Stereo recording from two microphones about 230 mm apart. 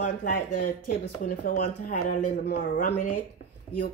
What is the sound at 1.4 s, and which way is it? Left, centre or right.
Speech, left.